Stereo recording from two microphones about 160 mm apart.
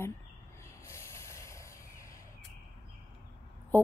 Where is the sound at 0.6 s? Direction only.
15° left (ahead or behind).